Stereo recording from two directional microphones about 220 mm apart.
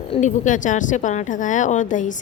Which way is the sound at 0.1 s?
35° left (ahead or behind).